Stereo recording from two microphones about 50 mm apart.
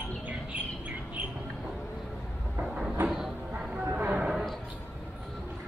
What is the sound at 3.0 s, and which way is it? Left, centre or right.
Music, centre.